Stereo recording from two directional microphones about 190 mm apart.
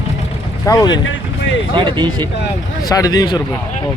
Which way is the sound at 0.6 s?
20° left (ahead or behind).